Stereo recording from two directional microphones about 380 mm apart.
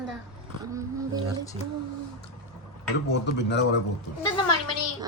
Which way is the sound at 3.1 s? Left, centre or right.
Left.